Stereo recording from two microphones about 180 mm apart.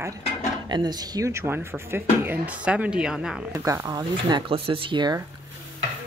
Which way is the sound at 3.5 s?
15° right (ahead or behind).